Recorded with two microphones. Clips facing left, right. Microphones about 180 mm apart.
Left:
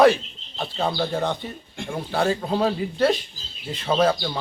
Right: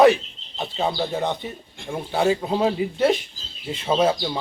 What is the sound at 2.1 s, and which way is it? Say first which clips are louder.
Speech: right 2 dB; 15° right (ahead or behind).